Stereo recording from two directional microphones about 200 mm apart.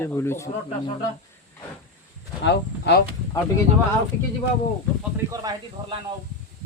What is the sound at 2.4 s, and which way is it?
Speech, 55° left (ahead or behind).